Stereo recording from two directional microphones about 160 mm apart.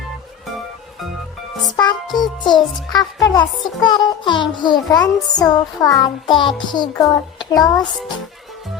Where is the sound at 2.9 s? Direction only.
25° left (ahead or behind).